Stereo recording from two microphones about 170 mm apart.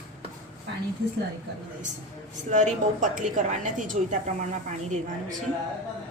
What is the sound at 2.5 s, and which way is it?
A woman's voice, 45° right (ahead or behind).